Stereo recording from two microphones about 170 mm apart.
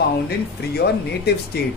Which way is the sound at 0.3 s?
70° left (ahead or behind).